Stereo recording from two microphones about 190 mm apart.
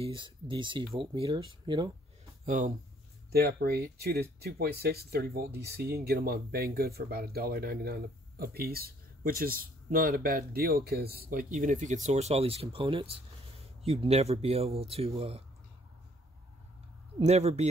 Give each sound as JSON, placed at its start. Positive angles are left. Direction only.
{"t": 0.0, "sound": "speech", "side_deg": -25}
{"t": 2.4, "sound": "speech", "side_deg": -40}
{"t": 3.3, "sound": "speech", "side_deg": -55}
{"t": 17.2, "sound": "speech", "side_deg": -35}